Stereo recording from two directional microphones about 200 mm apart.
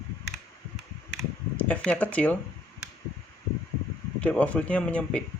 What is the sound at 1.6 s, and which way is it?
Speech, 5° left (ahead or behind).